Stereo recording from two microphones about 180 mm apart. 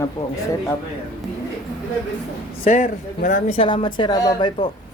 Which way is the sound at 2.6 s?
45° left (ahead or behind).